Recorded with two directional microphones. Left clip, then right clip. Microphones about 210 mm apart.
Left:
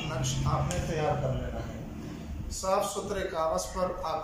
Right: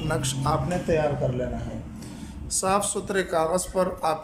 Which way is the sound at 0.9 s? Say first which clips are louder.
Right 12 dB; 55° right (ahead or behind).